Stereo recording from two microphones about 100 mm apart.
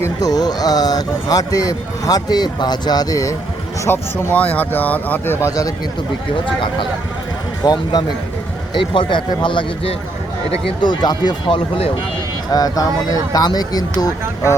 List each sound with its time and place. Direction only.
0.2 s speech: 40° left (ahead or behind)
3.8 s speech: 20° left (ahead or behind)
7.6 s speech: 40° left (ahead or behind)
8.7 s speech: 55° left (ahead or behind); by 14.5 s 40° left (ahead or behind)